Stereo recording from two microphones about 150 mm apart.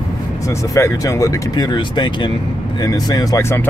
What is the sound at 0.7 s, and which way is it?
Speech, 20° left (ahead or behind).